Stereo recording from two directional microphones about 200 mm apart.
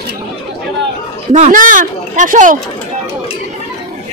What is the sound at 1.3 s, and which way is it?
Speech, 40° right (ahead or behind).